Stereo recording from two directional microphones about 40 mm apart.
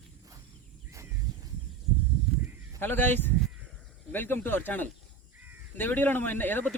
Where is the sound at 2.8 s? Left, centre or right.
Left.